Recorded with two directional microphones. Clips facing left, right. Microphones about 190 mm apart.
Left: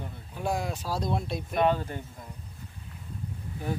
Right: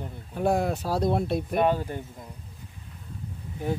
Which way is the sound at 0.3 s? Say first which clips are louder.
Right 6 dB; 55° right (ahead or behind).